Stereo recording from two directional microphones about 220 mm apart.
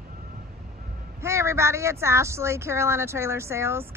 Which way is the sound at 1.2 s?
10° right (ahead or behind).